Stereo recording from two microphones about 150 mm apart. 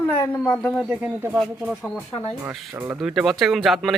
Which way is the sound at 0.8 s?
10° right (ahead or behind).